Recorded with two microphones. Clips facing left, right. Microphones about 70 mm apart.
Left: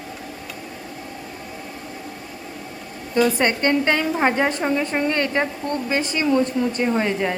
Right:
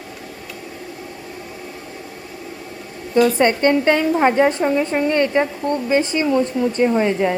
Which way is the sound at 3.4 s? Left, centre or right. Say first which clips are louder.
Right 4 dB; right.